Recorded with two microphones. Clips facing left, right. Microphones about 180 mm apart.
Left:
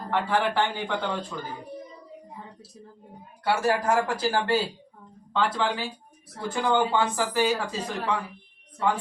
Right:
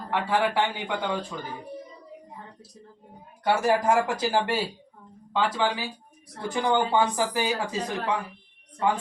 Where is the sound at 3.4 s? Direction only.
20° right (ahead or behind).